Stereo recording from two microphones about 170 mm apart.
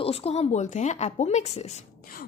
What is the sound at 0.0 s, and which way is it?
A woman's voice, 35° left (ahead or behind).